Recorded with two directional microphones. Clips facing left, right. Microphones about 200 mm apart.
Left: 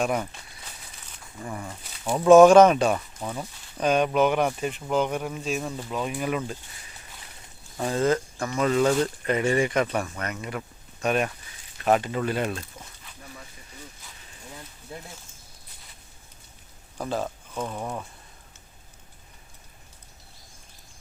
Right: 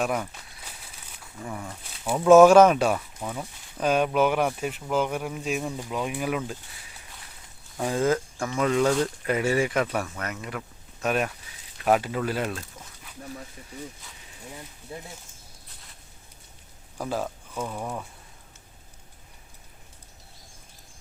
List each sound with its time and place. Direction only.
0.0 s speech: centre (ahead or behind)
7.8 s speech: 10° right (ahead or behind)
17.0 s speech: 5° right (ahead or behind)